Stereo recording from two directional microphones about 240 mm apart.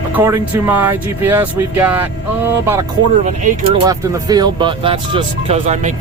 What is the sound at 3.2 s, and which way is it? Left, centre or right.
Speech, right.